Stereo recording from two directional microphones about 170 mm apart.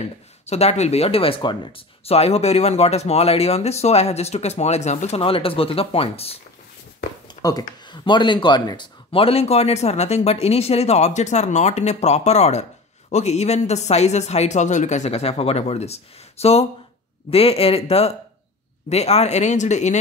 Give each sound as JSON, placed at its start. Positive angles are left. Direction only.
{"t": 0.5, "sound": "speech", "side_deg": 40}
{"t": 7.2, "sound": "speech", "side_deg": 25}